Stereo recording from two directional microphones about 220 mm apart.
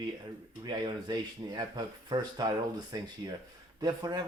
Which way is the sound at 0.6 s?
20° right (ahead or behind).